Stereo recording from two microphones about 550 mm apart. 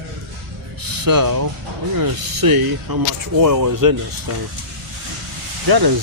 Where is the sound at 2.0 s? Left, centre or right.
Right.